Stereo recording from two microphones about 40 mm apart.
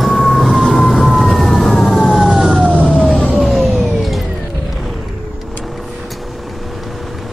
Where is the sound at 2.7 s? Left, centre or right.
Left.